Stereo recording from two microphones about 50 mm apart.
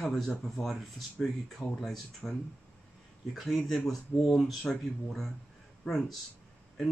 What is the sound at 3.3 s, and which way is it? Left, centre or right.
Speech, centre.